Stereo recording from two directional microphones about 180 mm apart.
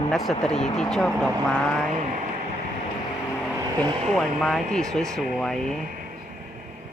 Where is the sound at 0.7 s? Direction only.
5° left (ahead or behind).